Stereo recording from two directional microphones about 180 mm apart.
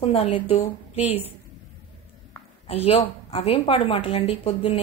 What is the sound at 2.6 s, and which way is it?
A woman's voice, 30° left (ahead or behind).